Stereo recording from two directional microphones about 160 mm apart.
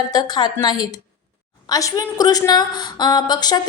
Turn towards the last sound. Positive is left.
turn(degrees=25)  # may be behind; listen again after turning